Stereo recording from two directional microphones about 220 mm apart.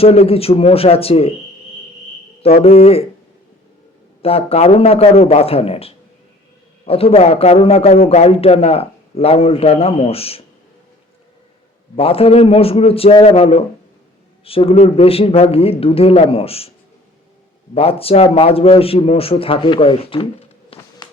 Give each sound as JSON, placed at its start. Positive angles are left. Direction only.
{"t": 0.0, "sound": "a man's voice", "side_deg": 25}
{"t": 2.4, "sound": "a man's voice", "side_deg": 25}
{"t": 4.2, "sound": "a man's voice", "side_deg": 25}
{"t": 11.9, "sound": "a man's voice", "side_deg": 25}
{"t": 17.7, "sound": "a man's voice", "side_deg": 25}